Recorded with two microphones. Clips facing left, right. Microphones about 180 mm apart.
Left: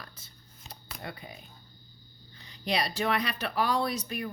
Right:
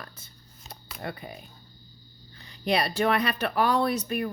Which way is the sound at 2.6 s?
55° right (ahead or behind).